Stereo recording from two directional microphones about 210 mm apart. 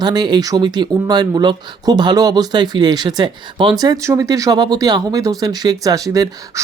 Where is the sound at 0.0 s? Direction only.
20° right (ahead or behind).